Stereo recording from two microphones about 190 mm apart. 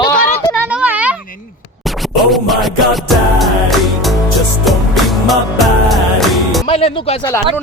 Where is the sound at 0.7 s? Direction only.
5° right (ahead or behind).